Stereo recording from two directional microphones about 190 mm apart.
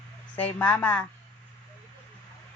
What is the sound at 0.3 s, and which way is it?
Speech, 10° left (ahead or behind).